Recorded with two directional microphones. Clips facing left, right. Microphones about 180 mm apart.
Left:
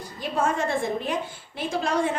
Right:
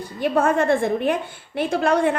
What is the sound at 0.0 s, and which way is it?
A woman's voice, 60° right (ahead or behind).